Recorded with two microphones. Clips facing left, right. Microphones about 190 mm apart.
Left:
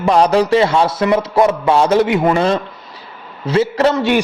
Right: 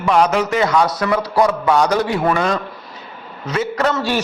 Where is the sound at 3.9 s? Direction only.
20° left (ahead or behind).